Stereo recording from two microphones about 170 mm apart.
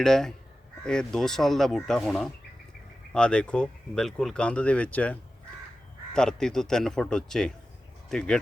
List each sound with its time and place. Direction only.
0.0 s speech: 5° left (ahead or behind)
6.1 s speech: 5° left (ahead or behind)